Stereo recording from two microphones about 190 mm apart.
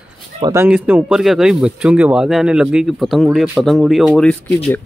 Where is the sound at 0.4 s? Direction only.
15° right (ahead or behind).